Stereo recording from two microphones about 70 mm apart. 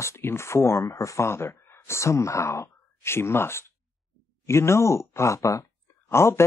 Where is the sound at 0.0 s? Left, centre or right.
Left.